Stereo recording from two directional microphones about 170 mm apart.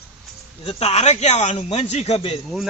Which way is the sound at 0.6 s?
40° left (ahead or behind).